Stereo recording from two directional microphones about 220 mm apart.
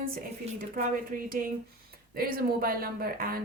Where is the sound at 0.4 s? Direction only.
30° right (ahead or behind).